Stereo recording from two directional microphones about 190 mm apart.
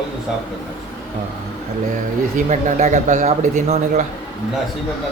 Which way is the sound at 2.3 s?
40° right (ahead or behind).